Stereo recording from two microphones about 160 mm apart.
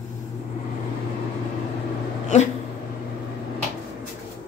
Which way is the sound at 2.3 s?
45° left (ahead or behind).